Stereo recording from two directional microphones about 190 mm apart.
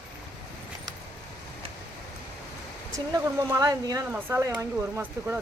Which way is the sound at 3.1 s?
15° right (ahead or behind).